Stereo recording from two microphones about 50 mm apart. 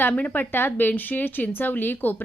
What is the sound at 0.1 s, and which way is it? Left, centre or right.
Speech, left.